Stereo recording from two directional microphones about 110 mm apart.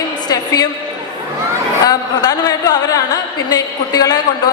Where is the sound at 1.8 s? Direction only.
35° left (ahead or behind).